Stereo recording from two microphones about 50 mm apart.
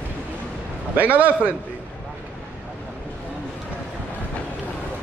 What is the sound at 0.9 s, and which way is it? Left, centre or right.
Speech, right.